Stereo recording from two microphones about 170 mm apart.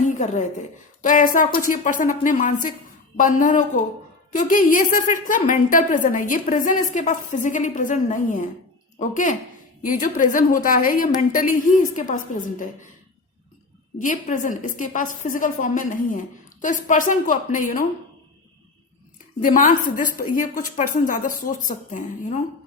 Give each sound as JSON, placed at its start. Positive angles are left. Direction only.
{"t": 0.0, "sound": "a sound", "side_deg": 45}
{"t": 1.0, "sound": "a woman's voice", "side_deg": 50}
{"t": 14.0, "sound": "a woman's voice", "side_deg": 50}
{"t": 19.4, "sound": "a woman's voice", "side_deg": 55}